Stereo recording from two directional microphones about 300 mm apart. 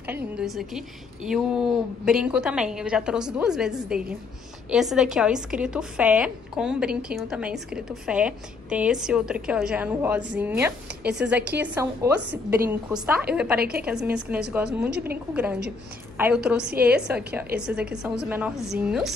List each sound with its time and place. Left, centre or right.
0.0 s a woman's voice: centre
13.6 s a woman's voice: right
13.8 s a woman's voice: centre